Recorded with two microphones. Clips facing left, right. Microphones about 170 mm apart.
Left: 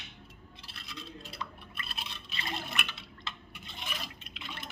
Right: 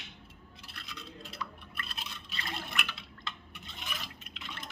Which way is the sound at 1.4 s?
25° left (ahead or behind).